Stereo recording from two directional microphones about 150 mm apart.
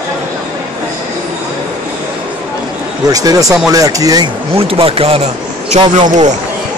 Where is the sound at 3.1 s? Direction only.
25° right (ahead or behind).